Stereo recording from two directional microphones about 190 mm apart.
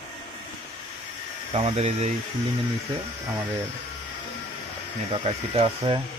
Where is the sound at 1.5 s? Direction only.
35° right (ahead or behind).